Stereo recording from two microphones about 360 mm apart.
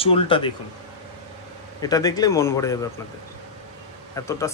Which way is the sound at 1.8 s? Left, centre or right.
Centre.